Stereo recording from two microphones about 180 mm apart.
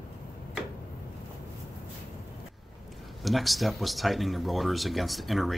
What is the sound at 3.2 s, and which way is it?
Speech, centre (ahead or behind).